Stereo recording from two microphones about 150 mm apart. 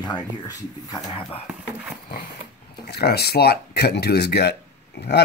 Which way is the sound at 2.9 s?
90° left.